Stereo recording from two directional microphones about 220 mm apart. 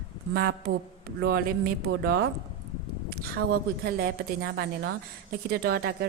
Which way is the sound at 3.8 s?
45° right (ahead or behind).